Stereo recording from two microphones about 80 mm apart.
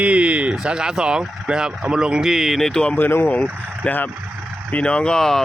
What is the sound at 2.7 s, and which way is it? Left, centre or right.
Speech, centre.